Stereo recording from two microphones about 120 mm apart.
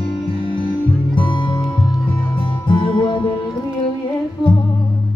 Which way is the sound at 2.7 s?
40° left (ahead or behind).